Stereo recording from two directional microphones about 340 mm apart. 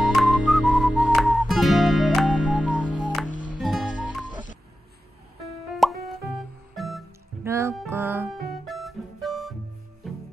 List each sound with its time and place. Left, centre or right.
0.0 s whistling: centre
0.5 s music: centre
2.8 s music: centre
3.3 s music: left
3.6 s music: centre
5.7 s music: centre